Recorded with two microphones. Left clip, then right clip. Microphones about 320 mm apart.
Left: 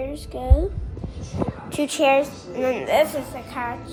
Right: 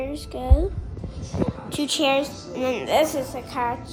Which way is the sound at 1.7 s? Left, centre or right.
Centre.